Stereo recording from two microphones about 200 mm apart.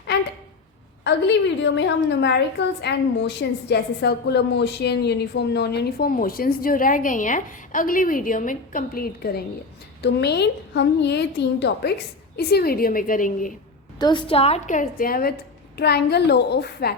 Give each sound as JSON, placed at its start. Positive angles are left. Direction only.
{"t": 1.0, "sound": "a woman's voice", "side_deg": 60}
{"t": 14.0, "sound": "a woman's voice", "side_deg": 25}